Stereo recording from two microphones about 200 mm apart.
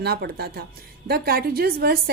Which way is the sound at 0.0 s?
55° right (ahead or behind).